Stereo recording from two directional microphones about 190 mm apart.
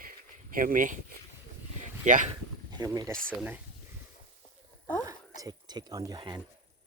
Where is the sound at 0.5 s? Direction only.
45° right (ahead or behind).